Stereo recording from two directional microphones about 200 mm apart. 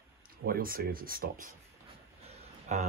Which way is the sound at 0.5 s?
45° right (ahead or behind).